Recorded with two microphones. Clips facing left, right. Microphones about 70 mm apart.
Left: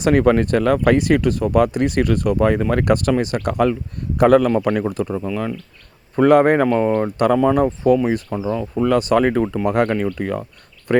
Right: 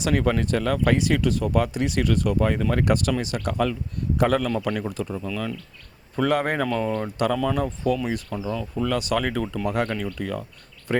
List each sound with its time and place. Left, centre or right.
0.0 s speech: left
9.6 s speech: left